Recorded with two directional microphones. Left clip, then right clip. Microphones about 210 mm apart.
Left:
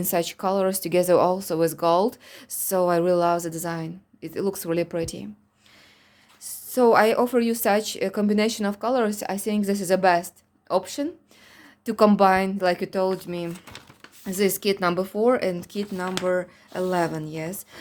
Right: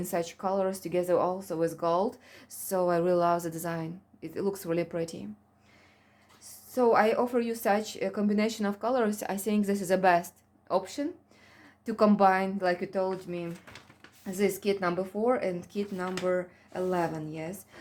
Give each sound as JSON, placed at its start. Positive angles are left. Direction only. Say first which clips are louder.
{"t": 0.0, "sound": "speech", "louder": "left 7 dB", "side_deg": 40}
{"t": 6.4, "sound": "speech", "louder": "left 6 dB", "side_deg": 40}